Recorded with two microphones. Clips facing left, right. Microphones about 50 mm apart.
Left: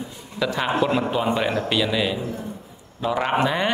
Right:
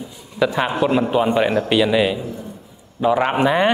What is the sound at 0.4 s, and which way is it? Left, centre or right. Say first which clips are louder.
A man's voice: right 4 dB; centre.